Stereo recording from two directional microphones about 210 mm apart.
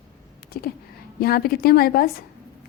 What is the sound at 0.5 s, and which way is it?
A woman's voice, 45° left (ahead or behind).